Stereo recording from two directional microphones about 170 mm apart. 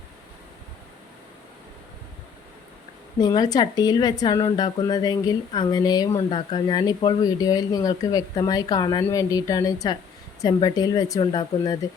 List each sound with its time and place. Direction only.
3.2 s speech: 25° left (ahead or behind)